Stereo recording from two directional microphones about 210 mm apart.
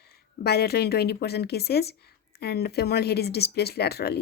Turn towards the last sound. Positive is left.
turn(degrees=50)  # may be behind; listen again after turning